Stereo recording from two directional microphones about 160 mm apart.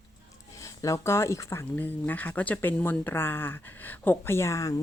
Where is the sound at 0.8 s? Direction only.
20° left (ahead or behind).